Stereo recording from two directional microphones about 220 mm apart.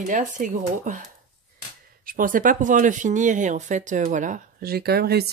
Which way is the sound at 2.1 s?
40° right (ahead or behind).